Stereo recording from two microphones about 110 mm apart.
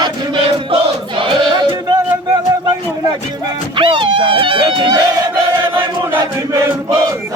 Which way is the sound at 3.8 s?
50° right (ahead or behind).